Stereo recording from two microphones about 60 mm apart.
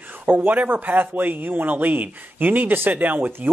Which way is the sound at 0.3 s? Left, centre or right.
Right.